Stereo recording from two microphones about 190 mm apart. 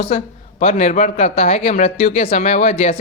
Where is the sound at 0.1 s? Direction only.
35° left (ahead or behind).